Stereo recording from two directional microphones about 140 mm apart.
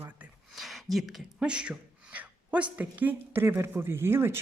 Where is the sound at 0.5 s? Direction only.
Centre (ahead or behind).